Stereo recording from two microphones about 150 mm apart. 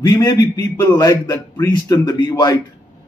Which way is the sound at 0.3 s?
25° left (ahead or behind).